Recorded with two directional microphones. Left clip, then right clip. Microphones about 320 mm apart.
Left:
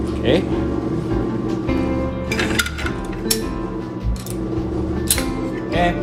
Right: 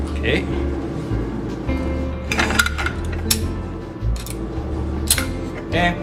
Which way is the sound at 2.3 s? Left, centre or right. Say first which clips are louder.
Right 3 dB; centre.